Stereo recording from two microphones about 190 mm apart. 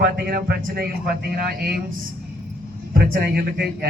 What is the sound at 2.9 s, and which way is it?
Speech, 55° right (ahead or behind).